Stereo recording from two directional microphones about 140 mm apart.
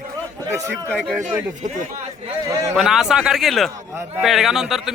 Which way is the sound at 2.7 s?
5° right (ahead or behind).